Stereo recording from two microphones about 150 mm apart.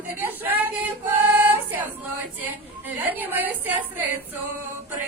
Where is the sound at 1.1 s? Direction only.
10° right (ahead or behind).